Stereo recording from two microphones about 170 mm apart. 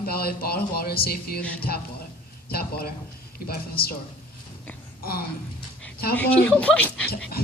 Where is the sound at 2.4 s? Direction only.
65° left (ahead or behind).